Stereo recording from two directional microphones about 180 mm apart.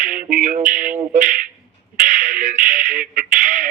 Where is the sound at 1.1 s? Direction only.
45° right (ahead or behind).